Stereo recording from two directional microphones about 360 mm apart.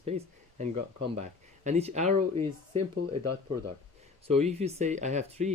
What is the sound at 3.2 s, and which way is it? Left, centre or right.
Speech, right.